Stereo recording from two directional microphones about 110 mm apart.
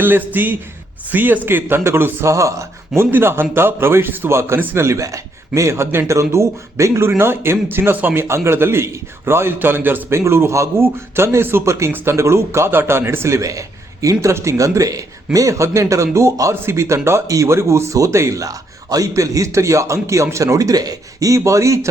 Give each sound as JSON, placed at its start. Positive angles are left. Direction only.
{"t": 0.0, "sound": "a man's voice", "side_deg": -20}